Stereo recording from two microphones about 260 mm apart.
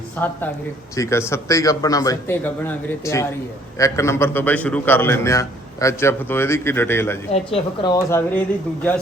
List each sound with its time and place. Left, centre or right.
0.2 s a man's voice: centre
7.3 s a woman's voice: centre
8.1 s a man's voice: centre